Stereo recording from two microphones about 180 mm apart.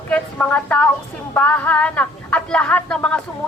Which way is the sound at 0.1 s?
10° left (ahead or behind).